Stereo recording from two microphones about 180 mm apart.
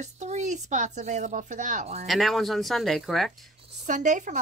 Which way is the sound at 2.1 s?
Centre (ahead or behind).